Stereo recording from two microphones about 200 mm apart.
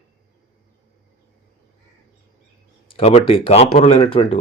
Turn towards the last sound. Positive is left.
turn(degrees=30)  # may be behind; listen again after turning